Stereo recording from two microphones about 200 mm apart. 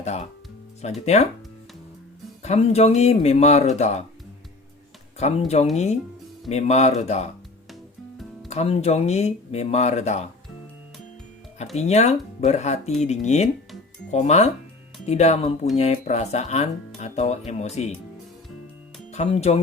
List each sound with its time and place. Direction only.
0.0 s speech: 30° left (ahead or behind)
2.4 s speech: 30° left (ahead or behind)
5.2 s speech: 35° left (ahead or behind)
8.4 s speech: 30° left (ahead or behind)
11.8 s speech: 35° left (ahead or behind)
19.1 s speech: 30° left (ahead or behind)